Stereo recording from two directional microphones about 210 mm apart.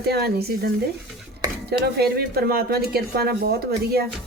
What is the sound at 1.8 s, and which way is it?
Speech, 50° right (ahead or behind).